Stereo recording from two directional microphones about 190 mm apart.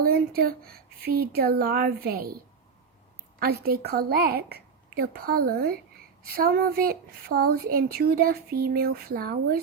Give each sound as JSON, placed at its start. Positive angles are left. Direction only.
{"t": 0.0, "sound": "speech", "side_deg": -50}
{"t": 3.4, "sound": "speech", "side_deg": -55}